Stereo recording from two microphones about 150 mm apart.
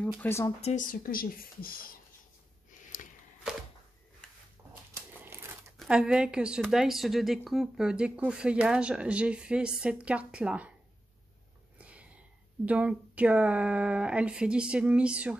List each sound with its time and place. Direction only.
0.2 s speech: 15° left (ahead or behind)
0.6 s speech: 45° left (ahead or behind)
0.8 s speech: 70° left (ahead or behind)
4.6 s a sound: 15° right (ahead or behind)
5.8 s a woman's voice: 5° right (ahead or behind)
11.8 s a sound: 10° right (ahead or behind)
12.6 s speech: 10° right (ahead or behind)